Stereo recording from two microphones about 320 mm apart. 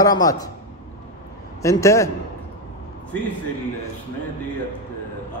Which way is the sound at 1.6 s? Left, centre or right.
Centre.